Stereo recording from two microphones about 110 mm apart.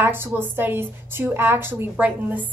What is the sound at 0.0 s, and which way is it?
A woman's voice, 20° right (ahead or behind).